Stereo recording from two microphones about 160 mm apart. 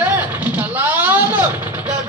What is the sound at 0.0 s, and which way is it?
Vehicle, 10° right (ahead or behind).